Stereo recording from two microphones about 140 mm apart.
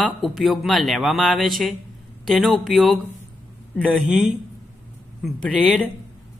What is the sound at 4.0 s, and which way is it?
Speech, 5° right (ahead or behind).